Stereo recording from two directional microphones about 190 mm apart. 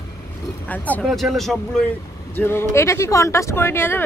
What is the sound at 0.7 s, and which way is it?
Speech, 10° left (ahead or behind).